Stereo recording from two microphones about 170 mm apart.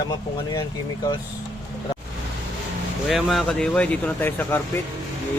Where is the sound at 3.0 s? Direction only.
Centre (ahead or behind).